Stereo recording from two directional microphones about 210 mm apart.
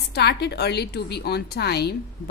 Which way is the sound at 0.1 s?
50° left (ahead or behind).